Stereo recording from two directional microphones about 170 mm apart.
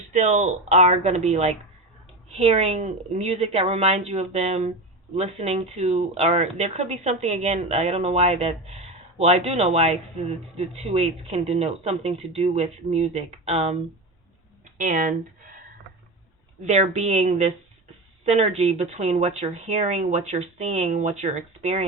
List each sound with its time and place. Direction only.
0.1 s speech: 45° right (ahead or behind)
14.8 s speech: 50° right (ahead or behind)
16.6 s speech: 40° right (ahead or behind)